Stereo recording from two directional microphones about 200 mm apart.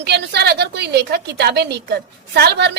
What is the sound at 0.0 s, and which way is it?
A woman's voice, 55° right (ahead or behind).